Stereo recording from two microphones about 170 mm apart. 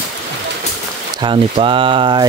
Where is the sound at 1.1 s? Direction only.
30° right (ahead or behind).